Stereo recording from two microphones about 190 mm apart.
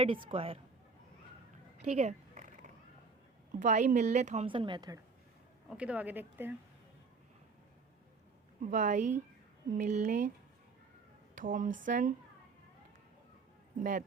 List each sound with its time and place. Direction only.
0.3 s a woman's voice: 30° right (ahead or behind)
1.9 s a sound: 35° right (ahead or behind)
3.6 s speech: 40° right (ahead or behind)
4.4 s a woman's voice: 25° right (ahead or behind)
5.6 s a woman's voice: 5° right (ahead or behind)
8.7 s speech: 40° right (ahead or behind)
11.3 s speech: 45° right (ahead or behind)
13.7 s speech: 45° right (ahead or behind)